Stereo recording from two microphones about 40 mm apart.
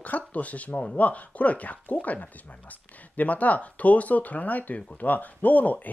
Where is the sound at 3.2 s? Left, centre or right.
Left.